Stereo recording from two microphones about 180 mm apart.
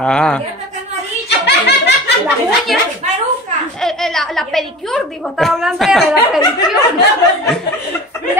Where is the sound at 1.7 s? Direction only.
70° left (ahead or behind).